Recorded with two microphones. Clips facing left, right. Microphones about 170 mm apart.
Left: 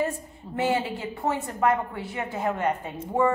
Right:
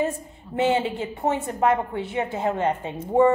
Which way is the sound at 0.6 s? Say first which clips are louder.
Right 4 dB; 25° right (ahead or behind).